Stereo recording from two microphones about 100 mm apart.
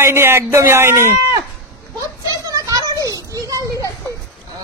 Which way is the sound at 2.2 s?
35° right (ahead or behind).